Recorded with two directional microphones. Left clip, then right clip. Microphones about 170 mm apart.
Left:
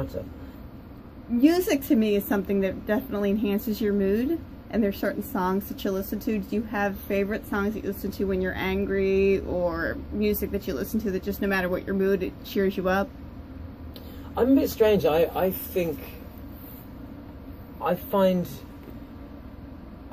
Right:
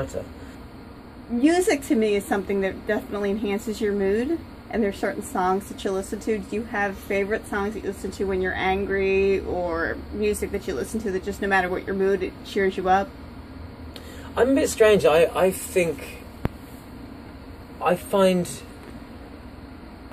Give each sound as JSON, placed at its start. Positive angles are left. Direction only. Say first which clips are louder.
{"t": 1.4, "sound": "a woman's voice", "louder": "right 2 dB", "side_deg": 30}
{"t": 14.3, "sound": "speech", "louder": "right 2 dB", "side_deg": -5}
{"t": 17.8, "sound": "speech", "louder": "right 3 dB", "side_deg": -10}